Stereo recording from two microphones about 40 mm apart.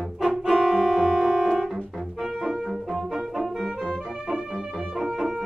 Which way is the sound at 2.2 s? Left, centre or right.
Centre.